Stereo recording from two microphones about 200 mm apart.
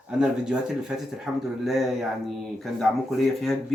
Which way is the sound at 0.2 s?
5° right (ahead or behind).